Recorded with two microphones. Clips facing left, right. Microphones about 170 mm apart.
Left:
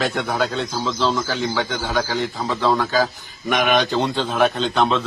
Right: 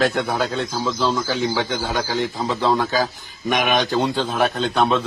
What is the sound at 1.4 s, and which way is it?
A man's voice, 15° right (ahead or behind).